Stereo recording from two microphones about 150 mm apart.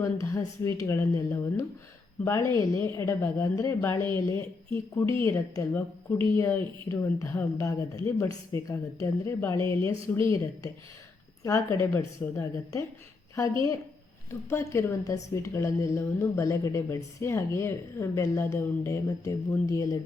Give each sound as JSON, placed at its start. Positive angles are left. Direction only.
{"t": 0.0, "sound": "a woman's voice", "side_deg": 20}
{"t": 14.5, "sound": "a woman's voice", "side_deg": 20}